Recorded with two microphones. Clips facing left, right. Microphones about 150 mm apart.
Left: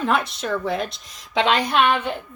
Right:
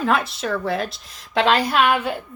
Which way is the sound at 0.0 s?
Centre (ahead or behind).